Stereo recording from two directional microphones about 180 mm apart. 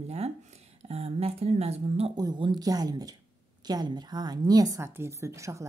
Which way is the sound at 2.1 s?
25° right (ahead or behind).